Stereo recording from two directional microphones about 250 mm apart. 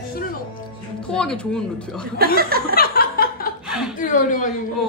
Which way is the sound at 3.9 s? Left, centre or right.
Left.